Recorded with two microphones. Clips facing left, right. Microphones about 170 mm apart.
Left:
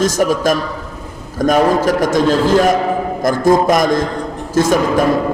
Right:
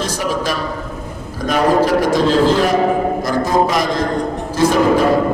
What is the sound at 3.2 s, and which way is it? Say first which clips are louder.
A man's voice: left 3 dB; 50° left (ahead or behind).